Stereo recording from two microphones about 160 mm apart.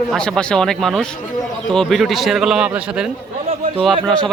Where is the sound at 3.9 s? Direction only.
5° left (ahead or behind).